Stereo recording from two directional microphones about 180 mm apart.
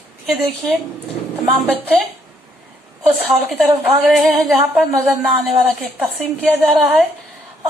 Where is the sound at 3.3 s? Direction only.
Centre (ahead or behind).